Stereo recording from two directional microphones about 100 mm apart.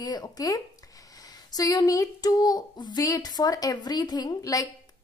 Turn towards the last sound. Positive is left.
turn(degrees=35)  # may be behind; listen again after turning